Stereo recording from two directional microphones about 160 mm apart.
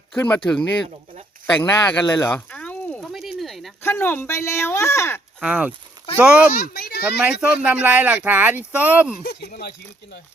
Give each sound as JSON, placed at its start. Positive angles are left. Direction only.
{"t": 0.2, "sound": "speech", "side_deg": 10}
{"t": 3.0, "sound": "a sound", "side_deg": 0}
{"t": 3.8, "sound": "speech", "side_deg": 15}
{"t": 5.4, "sound": "speech", "side_deg": -10}
{"t": 6.5, "sound": "a child's voice", "side_deg": 80}
{"t": 7.0, "sound": "speech", "side_deg": -5}
{"t": 9.2, "sound": "speech", "side_deg": 90}